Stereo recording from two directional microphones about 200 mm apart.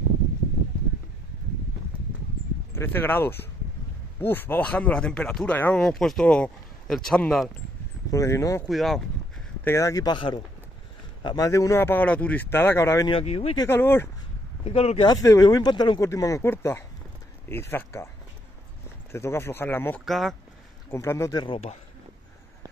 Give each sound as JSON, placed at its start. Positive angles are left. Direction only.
{"t": 2.7, "sound": "speech", "side_deg": 10}
{"t": 8.1, "sound": "speech", "side_deg": 15}
{"t": 8.6, "sound": "speech", "side_deg": 0}
{"t": 9.7, "sound": "speech", "side_deg": 15}
{"t": 13.1, "sound": "speech", "side_deg": 30}
{"t": 13.6, "sound": "speech", "side_deg": 10}
{"t": 14.6, "sound": "speech", "side_deg": 30}
{"t": 15.1, "sound": "speech", "side_deg": 15}
{"t": 19.1, "sound": "speech", "side_deg": 15}
{"t": 20.1, "sound": "speech", "side_deg": 0}
{"t": 20.9, "sound": "speech", "side_deg": 15}